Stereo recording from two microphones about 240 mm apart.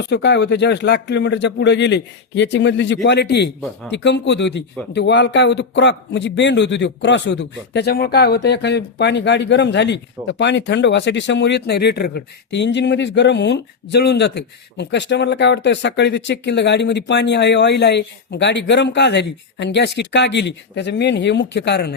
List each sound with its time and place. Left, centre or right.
0.0 s a man's voice: left